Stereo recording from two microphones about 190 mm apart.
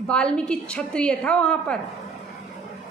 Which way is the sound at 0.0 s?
5° left (ahead or behind).